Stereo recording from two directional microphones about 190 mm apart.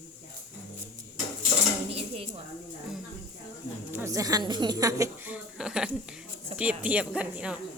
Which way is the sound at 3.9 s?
15° right (ahead or behind).